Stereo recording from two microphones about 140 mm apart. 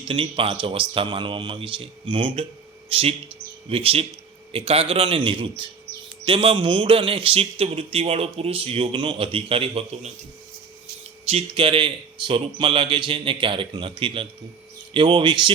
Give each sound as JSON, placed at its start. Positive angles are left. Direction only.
{"t": 0.0, "sound": "speech", "side_deg": -40}
{"t": 11.3, "sound": "speech", "side_deg": -45}